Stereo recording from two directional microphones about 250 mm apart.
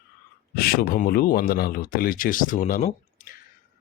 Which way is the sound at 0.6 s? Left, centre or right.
Left.